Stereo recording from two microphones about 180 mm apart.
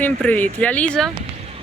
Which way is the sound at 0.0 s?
10° left (ahead or behind).